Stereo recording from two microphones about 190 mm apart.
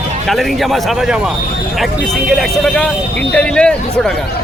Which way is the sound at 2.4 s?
5° left (ahead or behind).